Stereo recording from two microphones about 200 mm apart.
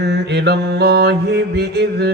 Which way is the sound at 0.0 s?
55° right (ahead or behind).